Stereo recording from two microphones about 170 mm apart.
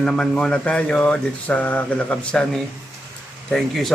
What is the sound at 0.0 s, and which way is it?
Speech, 5° left (ahead or behind).